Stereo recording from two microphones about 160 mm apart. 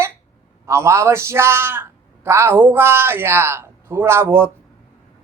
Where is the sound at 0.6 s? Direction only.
15° right (ahead or behind).